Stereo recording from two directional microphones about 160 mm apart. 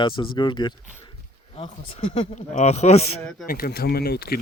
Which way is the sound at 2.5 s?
45° left (ahead or behind).